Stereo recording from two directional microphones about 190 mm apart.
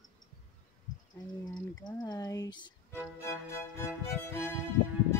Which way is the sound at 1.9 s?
20° left (ahead or behind).